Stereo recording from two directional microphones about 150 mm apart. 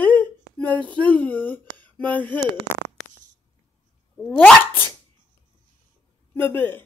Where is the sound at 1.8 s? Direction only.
10° left (ahead or behind).